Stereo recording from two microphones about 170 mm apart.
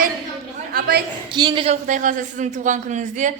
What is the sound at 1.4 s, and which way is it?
Speech, 25° right (ahead or behind).